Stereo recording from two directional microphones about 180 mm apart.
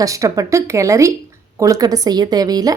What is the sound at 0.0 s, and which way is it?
A woman's voice, 20° right (ahead or behind).